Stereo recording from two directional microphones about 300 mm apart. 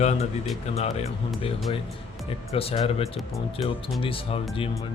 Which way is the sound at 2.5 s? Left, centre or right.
Centre.